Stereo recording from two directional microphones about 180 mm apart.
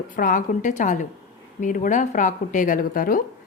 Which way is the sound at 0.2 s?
45° left (ahead or behind).